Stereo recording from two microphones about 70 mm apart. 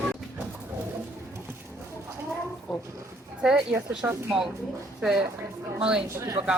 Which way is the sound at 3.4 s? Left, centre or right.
Centre.